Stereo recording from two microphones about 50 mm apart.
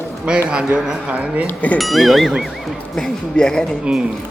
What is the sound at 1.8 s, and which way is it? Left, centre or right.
Speech, centre.